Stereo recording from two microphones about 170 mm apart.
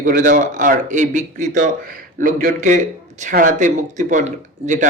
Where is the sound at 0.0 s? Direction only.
50° right (ahead or behind).